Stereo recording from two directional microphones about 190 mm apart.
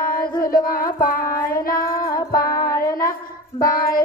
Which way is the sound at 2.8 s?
15° left (ahead or behind).